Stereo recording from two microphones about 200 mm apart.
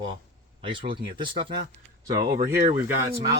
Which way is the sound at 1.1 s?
25° right (ahead or behind).